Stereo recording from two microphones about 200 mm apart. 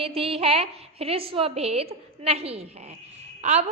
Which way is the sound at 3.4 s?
35° right (ahead or behind).